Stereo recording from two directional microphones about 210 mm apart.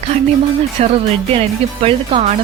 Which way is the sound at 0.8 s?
30° right (ahead or behind).